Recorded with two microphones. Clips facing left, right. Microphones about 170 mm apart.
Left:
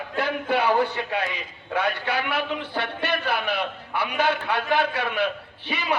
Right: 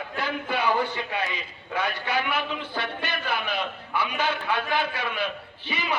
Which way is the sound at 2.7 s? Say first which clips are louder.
Left 4 dB; 65° left (ahead or behind).